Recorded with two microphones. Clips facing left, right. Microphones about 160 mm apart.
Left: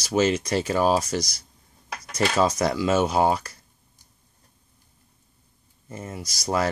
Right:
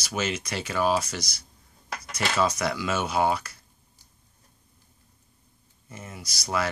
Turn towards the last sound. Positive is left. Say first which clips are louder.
# left 4 dB
turn(degrees=40)  # may be behind; listen again after turning